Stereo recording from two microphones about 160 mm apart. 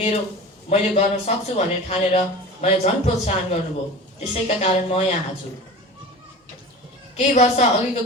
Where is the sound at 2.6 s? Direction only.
40° left (ahead or behind).